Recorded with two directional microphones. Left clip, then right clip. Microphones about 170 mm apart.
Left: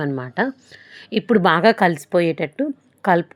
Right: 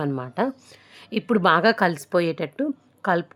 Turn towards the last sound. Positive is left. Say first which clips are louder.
# left 5 dB
turn(degrees=10)  # may be behind; listen again after turning